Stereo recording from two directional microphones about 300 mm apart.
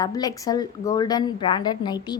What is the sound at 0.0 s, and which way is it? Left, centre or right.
A woman's voice, centre.